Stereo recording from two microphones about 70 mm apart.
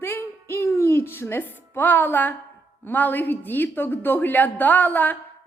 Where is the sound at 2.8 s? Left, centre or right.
Left.